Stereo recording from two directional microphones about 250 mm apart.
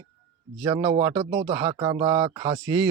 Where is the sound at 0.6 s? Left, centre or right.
Centre.